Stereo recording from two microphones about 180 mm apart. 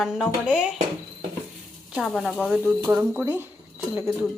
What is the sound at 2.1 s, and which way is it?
Speech, centre (ahead or behind).